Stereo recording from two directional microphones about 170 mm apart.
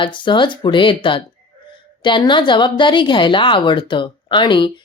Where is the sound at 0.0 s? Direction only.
30° left (ahead or behind).